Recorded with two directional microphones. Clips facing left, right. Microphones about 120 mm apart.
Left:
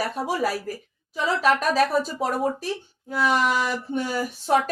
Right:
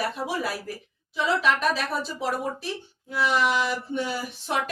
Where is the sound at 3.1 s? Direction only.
45° left (ahead or behind).